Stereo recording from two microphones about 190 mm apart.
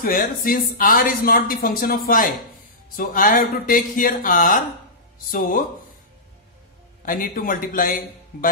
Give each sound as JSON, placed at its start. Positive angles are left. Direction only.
{"t": 0.0, "sound": "speech", "side_deg": 50}
{"t": 7.1, "sound": "speech", "side_deg": 45}